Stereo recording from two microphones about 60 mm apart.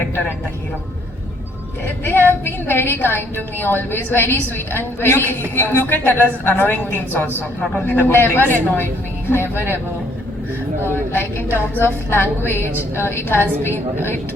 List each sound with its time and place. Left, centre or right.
2.0 s a woman's voice: left
10.8 s a woman's voice: left